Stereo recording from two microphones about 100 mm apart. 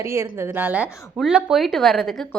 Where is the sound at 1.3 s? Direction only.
10° right (ahead or behind).